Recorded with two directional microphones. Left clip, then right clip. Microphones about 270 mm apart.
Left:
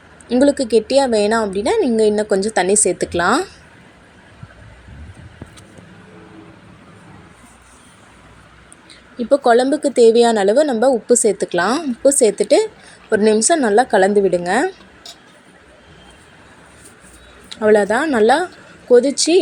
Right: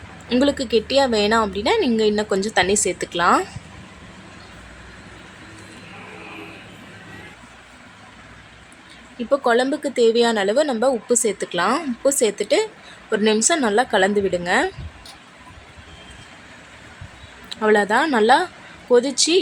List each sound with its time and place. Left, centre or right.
0.3 s a woman's voice: centre
9.1 s a woman's voice: centre
17.5 s a woman's voice: centre